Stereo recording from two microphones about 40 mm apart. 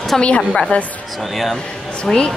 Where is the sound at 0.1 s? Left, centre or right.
Centre.